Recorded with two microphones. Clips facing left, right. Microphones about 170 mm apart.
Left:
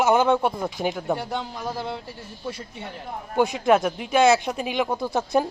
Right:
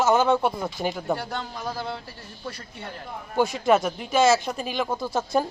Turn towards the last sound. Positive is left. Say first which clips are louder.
# left 2 dB
turn(degrees=15)  # may be behind; listen again after turning